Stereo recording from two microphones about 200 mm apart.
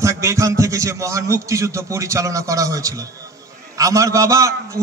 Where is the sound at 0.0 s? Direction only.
15° right (ahead or behind).